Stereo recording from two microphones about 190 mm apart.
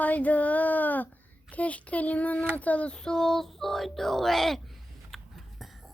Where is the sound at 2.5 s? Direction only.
10° left (ahead or behind).